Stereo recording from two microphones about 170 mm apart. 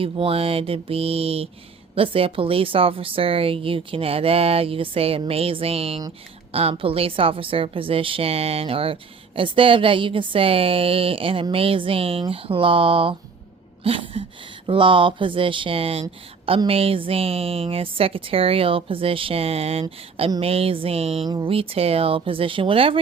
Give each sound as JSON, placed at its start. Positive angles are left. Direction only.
{"t": 0.0, "sound": "a woman's voice", "side_deg": -35}